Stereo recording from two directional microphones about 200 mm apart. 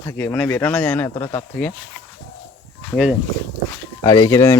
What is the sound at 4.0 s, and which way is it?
Speech, 20° left (ahead or behind).